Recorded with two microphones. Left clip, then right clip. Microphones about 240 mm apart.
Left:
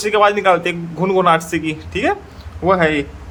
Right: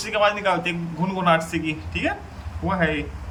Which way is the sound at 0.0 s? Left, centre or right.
Left.